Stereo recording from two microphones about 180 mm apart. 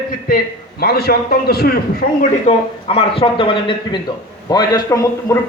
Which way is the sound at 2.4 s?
35° left (ahead or behind).